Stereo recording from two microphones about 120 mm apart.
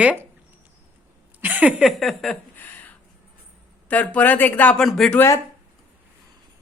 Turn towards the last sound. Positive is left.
turn(degrees=25)  # may be behind; listen again after turning